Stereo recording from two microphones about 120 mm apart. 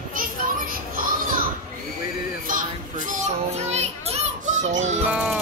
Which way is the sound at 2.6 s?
90° right.